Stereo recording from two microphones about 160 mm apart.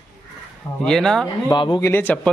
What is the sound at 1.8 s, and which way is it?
Speech, 15° left (ahead or behind).